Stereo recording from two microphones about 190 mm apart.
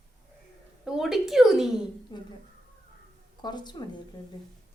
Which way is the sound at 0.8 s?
Centre (ahead or behind).